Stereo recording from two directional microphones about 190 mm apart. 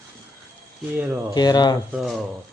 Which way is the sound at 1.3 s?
20° left (ahead or behind).